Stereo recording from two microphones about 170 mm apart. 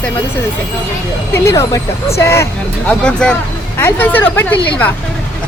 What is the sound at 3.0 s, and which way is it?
Speech, 5° left (ahead or behind).